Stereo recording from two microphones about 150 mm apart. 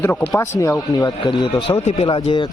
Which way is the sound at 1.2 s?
35° left (ahead or behind).